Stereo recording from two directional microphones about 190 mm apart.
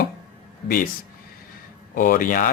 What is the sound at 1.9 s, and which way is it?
Speech, 45° left (ahead or behind).